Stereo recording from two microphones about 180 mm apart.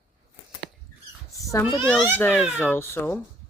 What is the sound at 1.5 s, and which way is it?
A child's voice, 15° left (ahead or behind).